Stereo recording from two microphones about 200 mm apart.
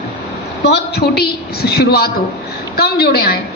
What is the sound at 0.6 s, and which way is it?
A woman's voice, 55° left (ahead or behind).